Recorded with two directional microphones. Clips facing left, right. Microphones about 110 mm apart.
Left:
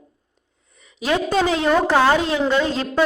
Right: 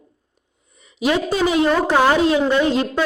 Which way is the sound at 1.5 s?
15° right (ahead or behind).